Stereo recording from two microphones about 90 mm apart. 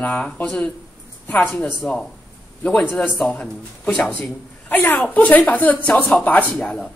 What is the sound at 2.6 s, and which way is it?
A woman's voice, 15° left (ahead or behind).